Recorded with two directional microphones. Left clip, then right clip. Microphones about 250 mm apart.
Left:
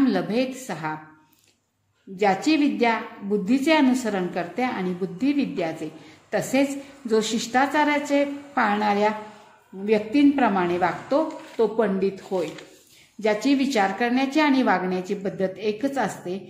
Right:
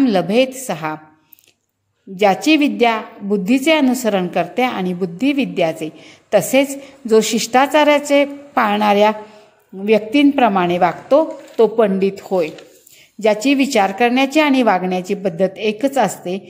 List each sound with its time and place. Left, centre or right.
0.0 s a woman's voice: right
2.1 s a woman's voice: right